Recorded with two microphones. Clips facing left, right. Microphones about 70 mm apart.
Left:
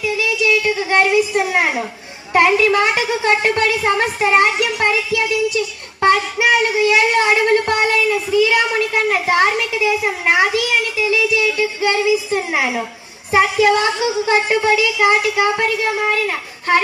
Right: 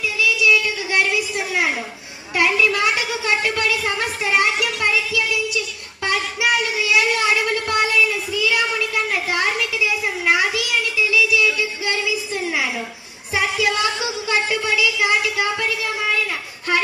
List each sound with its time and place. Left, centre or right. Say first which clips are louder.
0.0 s child singing: left 1 dB; left
2.3 s a woman's voice: left 5 dB; left